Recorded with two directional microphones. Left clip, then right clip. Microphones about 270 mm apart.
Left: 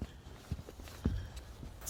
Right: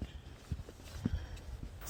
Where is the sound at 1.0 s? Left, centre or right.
Left.